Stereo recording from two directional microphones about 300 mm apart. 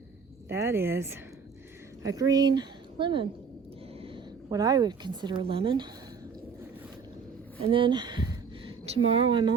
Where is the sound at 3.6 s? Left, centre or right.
Centre.